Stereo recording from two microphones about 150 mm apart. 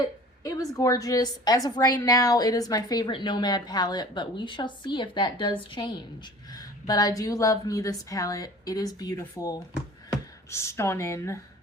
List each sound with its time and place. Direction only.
0.0 s a woman's voice: 25° left (ahead or behind)